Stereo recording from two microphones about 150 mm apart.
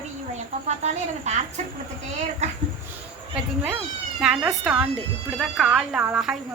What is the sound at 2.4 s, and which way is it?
Speech, 50° right (ahead or behind).